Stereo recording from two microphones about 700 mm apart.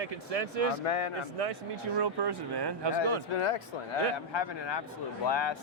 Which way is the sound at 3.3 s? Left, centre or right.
Left.